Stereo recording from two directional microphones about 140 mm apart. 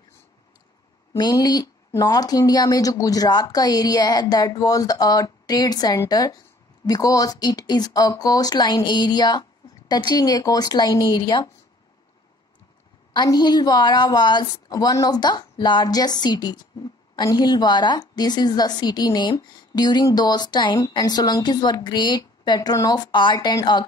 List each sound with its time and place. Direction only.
1.1 s a woman's voice: 30° left (ahead or behind)
13.1 s a woman's voice: 30° left (ahead or behind)